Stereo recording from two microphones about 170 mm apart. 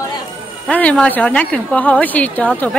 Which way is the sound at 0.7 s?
10° left (ahead or behind).